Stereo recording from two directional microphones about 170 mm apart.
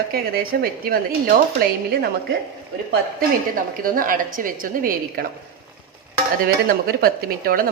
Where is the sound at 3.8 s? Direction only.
55° right (ahead or behind).